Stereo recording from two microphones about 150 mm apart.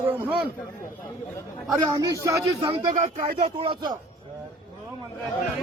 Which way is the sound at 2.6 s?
35° right (ahead or behind).